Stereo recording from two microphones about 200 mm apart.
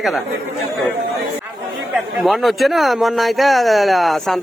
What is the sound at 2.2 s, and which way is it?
Speech, centre (ahead or behind).